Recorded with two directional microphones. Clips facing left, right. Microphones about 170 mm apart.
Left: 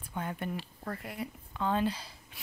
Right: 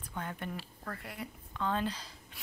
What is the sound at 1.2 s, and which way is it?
Speech, 15° left (ahead or behind).